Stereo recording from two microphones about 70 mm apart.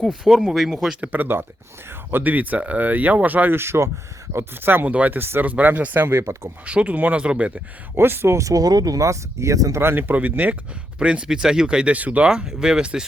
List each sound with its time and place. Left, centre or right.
0.1 s speech: centre
1.0 s speech: right
6.7 s speech: centre
7.9 s speech: right
9.8 s speech: right; by 13.1 s centre